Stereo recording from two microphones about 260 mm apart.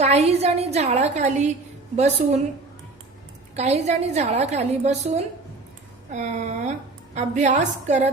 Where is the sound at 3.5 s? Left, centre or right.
Right.